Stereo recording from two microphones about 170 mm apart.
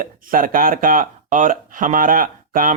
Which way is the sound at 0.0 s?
55° right (ahead or behind).